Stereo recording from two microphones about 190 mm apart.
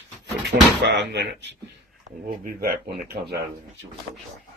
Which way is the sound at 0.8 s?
65° right (ahead or behind).